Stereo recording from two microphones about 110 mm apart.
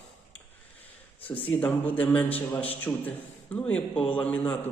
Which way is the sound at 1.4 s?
15° left (ahead or behind).